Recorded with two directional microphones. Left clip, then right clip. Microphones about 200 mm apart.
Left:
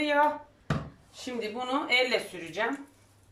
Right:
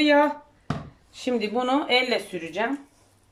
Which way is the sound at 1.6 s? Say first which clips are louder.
Right 4 dB; 45° right (ahead or behind).